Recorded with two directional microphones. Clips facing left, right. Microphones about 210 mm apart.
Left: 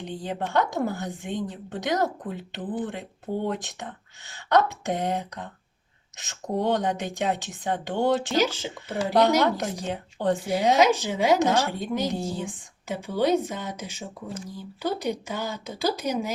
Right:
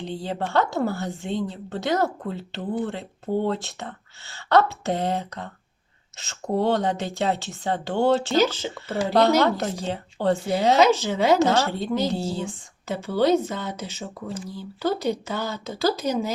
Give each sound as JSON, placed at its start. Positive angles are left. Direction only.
{"t": 0.2, "sound": "speech", "side_deg": 15}